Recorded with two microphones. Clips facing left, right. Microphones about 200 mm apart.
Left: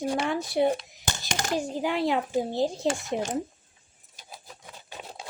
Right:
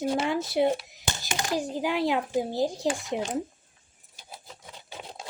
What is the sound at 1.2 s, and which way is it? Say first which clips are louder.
Speech: left 1 dB; 45° left (ahead or behind).